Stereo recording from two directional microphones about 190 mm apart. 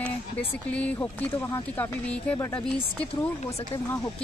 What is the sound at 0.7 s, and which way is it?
Speech, 5° left (ahead or behind).